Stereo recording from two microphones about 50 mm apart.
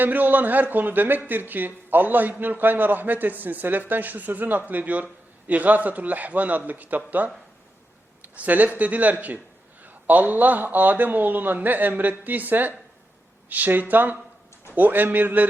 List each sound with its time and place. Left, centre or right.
0.0 s a man's voice: right